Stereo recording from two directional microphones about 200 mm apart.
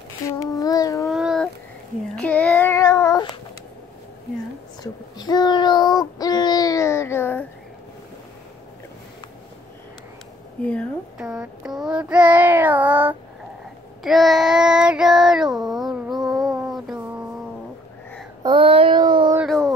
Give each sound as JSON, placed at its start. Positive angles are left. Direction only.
{"t": 0.4, "sound": "child singing", "side_deg": 15}
{"t": 1.0, "sound": "a sound", "side_deg": 0}
{"t": 2.1, "sound": "child singing", "side_deg": 5}
{"t": 5.1, "sound": "child singing", "side_deg": 20}
{"t": 10.7, "sound": "child singing", "side_deg": 5}
{"t": 18.4, "sound": "child singing", "side_deg": -25}
{"t": 19.3, "sound": "a sound", "side_deg": 0}